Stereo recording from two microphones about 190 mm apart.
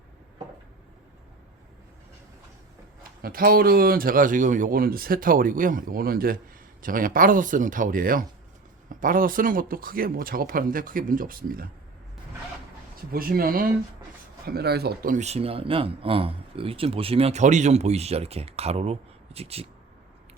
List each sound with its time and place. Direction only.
3.2 s a man's voice: 50° right (ahead or behind)
13.1 s a man's voice: 50° right (ahead or behind); by 19.6 s 30° right (ahead or behind)